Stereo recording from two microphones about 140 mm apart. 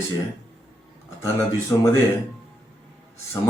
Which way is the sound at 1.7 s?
25° left (ahead or behind).